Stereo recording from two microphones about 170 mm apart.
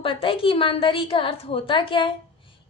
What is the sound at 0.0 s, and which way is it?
A woman's voice, 30° left (ahead or behind).